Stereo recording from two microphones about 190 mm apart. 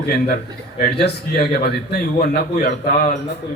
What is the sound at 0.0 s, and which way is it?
A man's voice, 55° left (ahead or behind).